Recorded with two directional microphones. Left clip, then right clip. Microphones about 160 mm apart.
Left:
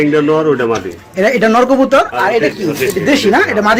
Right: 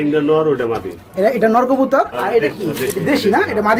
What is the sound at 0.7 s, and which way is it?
A man's voice, 10° left (ahead or behind).